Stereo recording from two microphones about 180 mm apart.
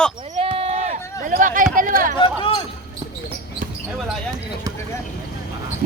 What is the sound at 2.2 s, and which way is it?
Speech, 30° left (ahead or behind).